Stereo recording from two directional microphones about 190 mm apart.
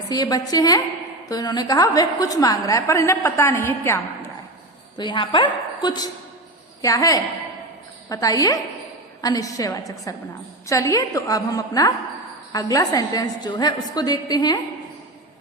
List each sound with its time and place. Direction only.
0.1 s a woman's voice: 20° left (ahead or behind)
4.9 s a woman's voice: 25° left (ahead or behind)